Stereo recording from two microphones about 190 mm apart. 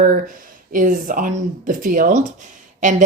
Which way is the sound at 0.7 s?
45° right (ahead or behind).